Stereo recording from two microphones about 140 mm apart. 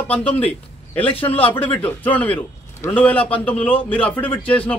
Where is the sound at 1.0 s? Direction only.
40° left (ahead or behind).